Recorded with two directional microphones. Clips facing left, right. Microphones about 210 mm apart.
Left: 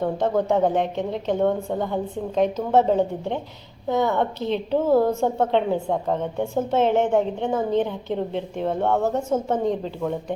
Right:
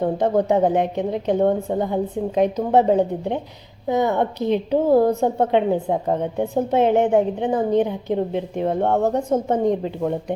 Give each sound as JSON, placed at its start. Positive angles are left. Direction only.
{"t": 0.0, "sound": "a woman's voice", "side_deg": -15}